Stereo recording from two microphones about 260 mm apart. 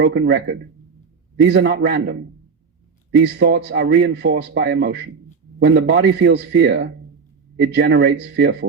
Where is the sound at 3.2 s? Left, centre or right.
Right.